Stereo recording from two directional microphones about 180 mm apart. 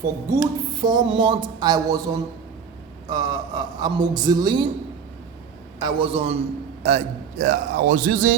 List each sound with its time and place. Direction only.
0.3 s speech: 20° right (ahead or behind)
3.1 s speech: 25° right (ahead or behind)
5.8 s a man's voice: 30° right (ahead or behind); by 8.4 s 50° right (ahead or behind)